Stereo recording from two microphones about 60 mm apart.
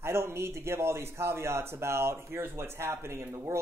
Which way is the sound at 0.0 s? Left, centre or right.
Right.